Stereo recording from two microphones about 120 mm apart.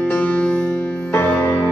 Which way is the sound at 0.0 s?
15° left (ahead or behind).